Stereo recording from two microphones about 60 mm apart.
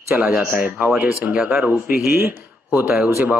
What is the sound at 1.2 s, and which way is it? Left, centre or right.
Speech, right.